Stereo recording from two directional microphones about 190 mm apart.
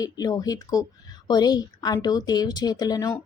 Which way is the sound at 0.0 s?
20° left (ahead or behind).